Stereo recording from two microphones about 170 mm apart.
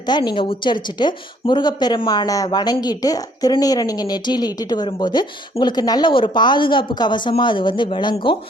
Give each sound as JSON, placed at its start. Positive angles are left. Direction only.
{"t": 0.1, "sound": "speech", "side_deg": 25}